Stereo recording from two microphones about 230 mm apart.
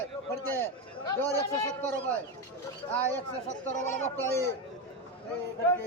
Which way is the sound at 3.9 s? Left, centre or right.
Centre.